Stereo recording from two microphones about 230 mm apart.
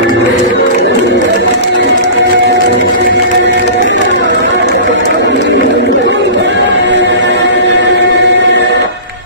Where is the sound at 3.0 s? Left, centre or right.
Right.